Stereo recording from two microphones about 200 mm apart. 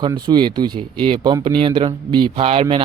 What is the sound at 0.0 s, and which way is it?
A man's voice, 20° right (ahead or behind).